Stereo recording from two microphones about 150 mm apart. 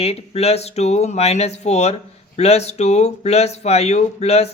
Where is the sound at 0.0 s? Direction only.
45° left (ahead or behind).